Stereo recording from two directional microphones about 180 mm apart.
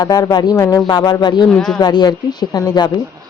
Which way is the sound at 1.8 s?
25° left (ahead or behind).